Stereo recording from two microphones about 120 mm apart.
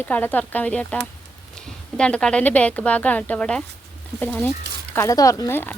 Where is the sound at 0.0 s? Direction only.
15° left (ahead or behind).